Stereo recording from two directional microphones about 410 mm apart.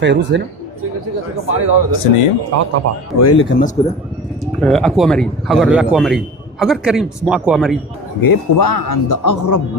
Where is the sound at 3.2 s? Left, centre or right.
Left.